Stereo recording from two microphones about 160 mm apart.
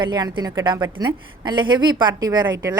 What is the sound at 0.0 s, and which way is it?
A woman's voice, 25° right (ahead or behind).